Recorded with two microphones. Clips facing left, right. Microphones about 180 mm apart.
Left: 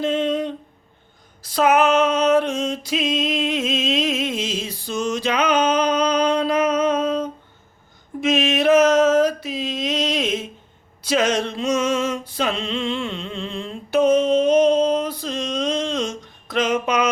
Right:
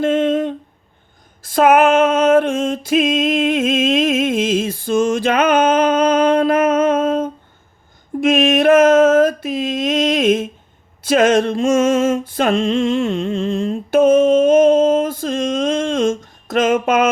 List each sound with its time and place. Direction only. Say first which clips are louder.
0.0 s a sound: right 5 dB; 50° right (ahead or behind)
8.2 s mantra: right 5 dB; 55° right (ahead or behind)
11.0 s music: right 7 dB; 50° right (ahead or behind)